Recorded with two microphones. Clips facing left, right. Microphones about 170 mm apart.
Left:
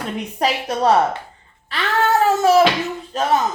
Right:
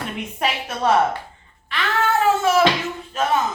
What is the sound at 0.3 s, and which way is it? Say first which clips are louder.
Speech: left 5 dB; 35° left (ahead or behind).